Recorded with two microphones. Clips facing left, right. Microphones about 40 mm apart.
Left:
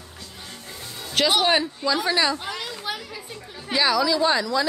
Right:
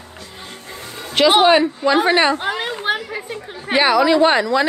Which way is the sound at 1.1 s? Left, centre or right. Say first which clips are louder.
Right 8 dB; right.